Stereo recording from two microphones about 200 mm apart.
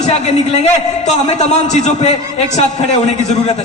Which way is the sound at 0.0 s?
35° left (ahead or behind).